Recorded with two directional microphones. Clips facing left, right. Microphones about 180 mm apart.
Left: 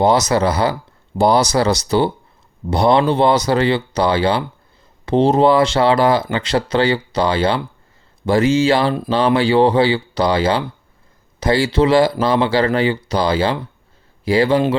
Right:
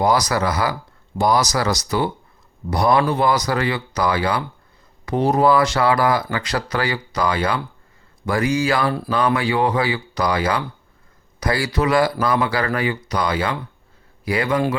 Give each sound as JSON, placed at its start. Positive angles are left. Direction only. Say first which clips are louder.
{"t": 0.0, "sound": "speech", "louder": "left 4 dB", "side_deg": 25}